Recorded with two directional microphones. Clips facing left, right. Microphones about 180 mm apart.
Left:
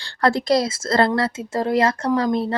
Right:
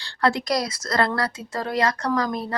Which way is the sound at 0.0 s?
40° left (ahead or behind).